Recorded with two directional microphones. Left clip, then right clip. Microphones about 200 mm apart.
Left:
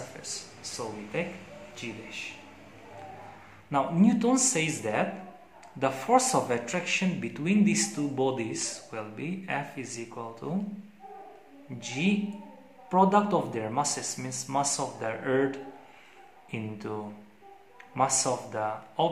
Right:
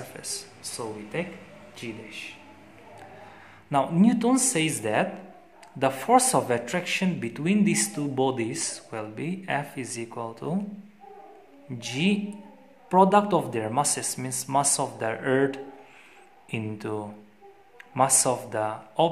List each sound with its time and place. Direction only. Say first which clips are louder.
0.2 s a sound: right 2 dB; 35° right (ahead or behind)
1.8 s speech: right 1 dB; 30° right (ahead or behind)
3.7 s speech: right 3 dB; 35° right (ahead or behind)
11.8 s speech: right 3 dB; 40° right (ahead or behind)